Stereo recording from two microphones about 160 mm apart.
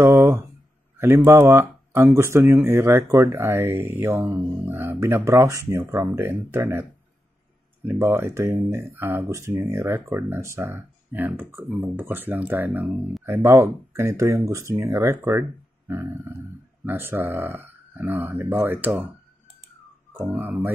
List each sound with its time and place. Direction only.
0.0 s speech: 15° right (ahead or behind)
16.8 s speech: 15° right (ahead or behind)
20.1 s speech: 10° right (ahead or behind)